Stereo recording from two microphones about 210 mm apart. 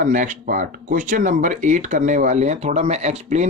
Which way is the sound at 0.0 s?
35° right (ahead or behind).